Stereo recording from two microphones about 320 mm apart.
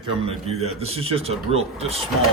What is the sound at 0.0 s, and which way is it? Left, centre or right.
A man's voice, centre.